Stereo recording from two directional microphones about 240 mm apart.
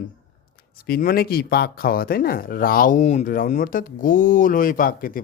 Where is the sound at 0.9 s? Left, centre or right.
Left.